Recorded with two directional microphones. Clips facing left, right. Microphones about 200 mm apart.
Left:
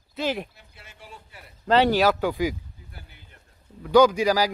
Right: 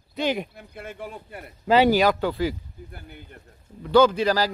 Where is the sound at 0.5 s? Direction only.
55° right (ahead or behind).